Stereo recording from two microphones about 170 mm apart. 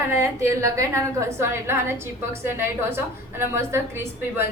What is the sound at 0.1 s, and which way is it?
A woman's voice, 15° right (ahead or behind).